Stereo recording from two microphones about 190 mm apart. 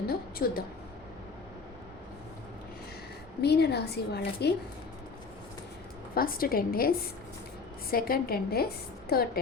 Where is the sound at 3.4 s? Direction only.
60° left (ahead or behind).